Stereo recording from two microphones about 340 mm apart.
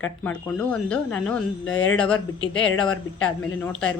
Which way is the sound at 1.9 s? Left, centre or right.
Centre.